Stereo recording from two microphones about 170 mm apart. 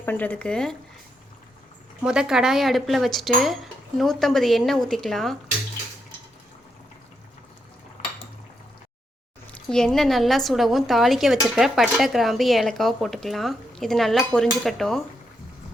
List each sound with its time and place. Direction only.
0.0 s speech: 10° left (ahead or behind)
2.0 s speech: 5° right (ahead or behind)
9.6 s speech: 5° left (ahead or behind)